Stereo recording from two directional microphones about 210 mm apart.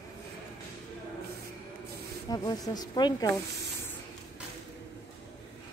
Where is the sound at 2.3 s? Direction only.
20° left (ahead or behind).